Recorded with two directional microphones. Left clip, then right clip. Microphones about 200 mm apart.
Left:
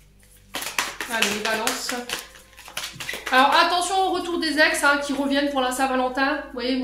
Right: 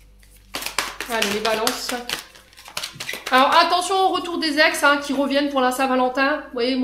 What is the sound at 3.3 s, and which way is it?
A woman's voice, 50° right (ahead or behind).